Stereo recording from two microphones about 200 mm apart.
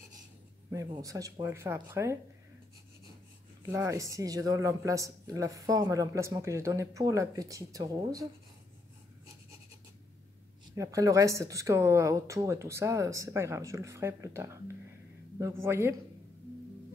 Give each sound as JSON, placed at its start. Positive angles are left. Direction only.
{"t": 0.7, "sound": "speech", "side_deg": -15}
{"t": 3.6, "sound": "speech", "side_deg": -15}
{"t": 10.7, "sound": "speech", "side_deg": -15}
{"t": 15.6, "sound": "speech", "side_deg": -15}